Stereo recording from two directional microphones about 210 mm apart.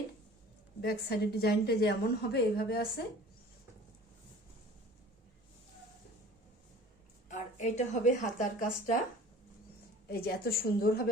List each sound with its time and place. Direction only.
0.8 s a woman's voice: 50° left (ahead or behind)
7.3 s a woman's voice: 35° left (ahead or behind)
10.1 s a woman's voice: 50° left (ahead or behind)